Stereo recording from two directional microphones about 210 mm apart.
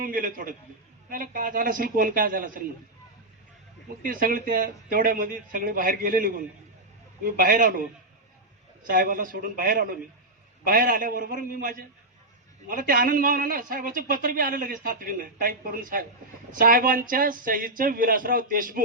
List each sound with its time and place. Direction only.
0.0 s a man's voice: 40° right (ahead or behind)
4.0 s a man's voice: 40° right (ahead or behind)
8.8 s a man's voice: 40° right (ahead or behind)